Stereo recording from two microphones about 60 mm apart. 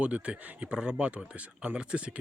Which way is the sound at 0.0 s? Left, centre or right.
Right.